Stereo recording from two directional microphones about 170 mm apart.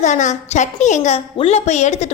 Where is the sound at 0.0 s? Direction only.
45° left (ahead or behind).